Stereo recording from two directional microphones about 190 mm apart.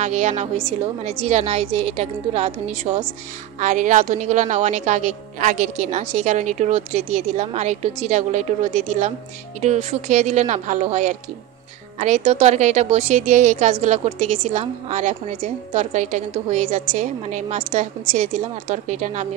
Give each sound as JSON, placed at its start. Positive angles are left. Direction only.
{"t": 0.0, "sound": "a woman's voice", "side_deg": -40}